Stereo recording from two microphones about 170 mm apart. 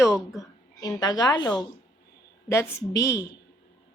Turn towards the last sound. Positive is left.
turn(degrees=15)  # may be behind; listen again after turning